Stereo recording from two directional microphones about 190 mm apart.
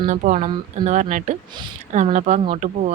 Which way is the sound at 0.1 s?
40° right (ahead or behind).